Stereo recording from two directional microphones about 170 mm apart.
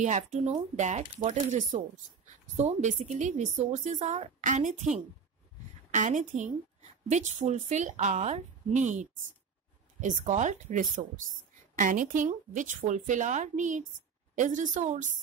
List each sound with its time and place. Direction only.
0.0 s a woman's voice: 45° right (ahead or behind)